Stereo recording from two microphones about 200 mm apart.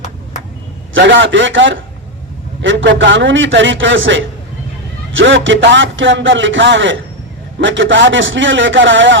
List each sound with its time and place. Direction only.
0.9 s a man's voice: 65° right (ahead or behind)